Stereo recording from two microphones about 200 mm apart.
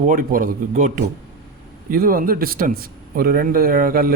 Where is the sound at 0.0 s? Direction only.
40° right (ahead or behind).